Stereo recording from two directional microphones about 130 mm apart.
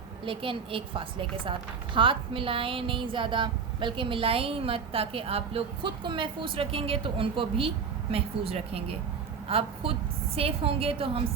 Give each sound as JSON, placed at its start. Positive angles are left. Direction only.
{"t": 0.3, "sound": "a woman's voice", "side_deg": -45}